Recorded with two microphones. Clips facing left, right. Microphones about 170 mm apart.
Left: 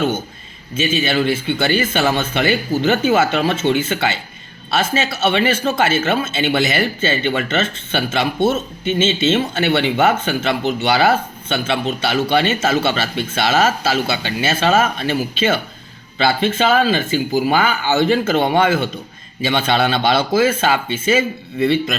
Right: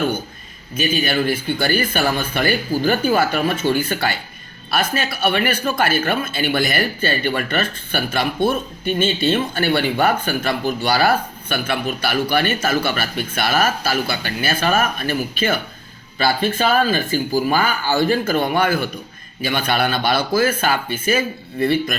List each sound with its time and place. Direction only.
0.7 s speech: 25° left (ahead or behind)